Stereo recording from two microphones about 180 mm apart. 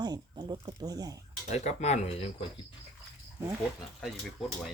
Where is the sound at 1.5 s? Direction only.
40° left (ahead or behind).